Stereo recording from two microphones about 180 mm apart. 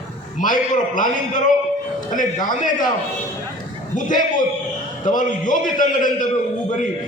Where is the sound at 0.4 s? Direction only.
45° left (ahead or behind).